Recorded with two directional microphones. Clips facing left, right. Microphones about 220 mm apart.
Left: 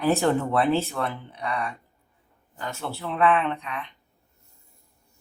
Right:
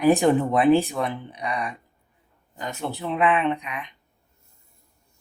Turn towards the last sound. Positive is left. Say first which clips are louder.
# right 4 dB
turn(degrees=-15)  # may be behind; listen again after turning